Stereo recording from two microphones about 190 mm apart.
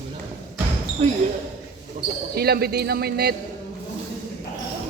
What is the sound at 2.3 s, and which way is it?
A man's voice, 55° right (ahead or behind).